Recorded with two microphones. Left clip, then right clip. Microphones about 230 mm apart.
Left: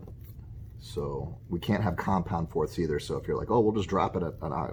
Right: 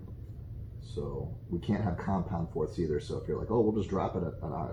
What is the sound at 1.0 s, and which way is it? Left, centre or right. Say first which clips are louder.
Speech: left 4 dB; left.